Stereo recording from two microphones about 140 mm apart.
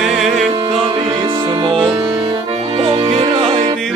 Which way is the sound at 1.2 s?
35° right (ahead or behind).